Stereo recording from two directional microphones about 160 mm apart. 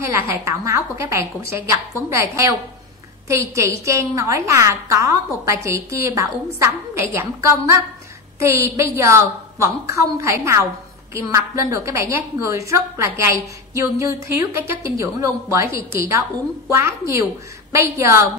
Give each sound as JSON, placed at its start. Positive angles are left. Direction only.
{"t": 0.0, "sound": "a woman's voice", "side_deg": -15}